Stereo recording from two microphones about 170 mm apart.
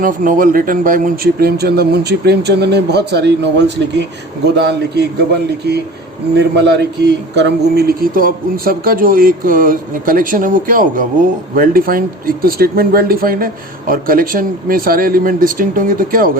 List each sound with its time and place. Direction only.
0.0 s speech: 55° right (ahead or behind); by 4.0 s 90° right
4.5 s speech: 75° right (ahead or behind)
6.3 s a man's voice: 85° right; by 16.4 s 55° right (ahead or behind)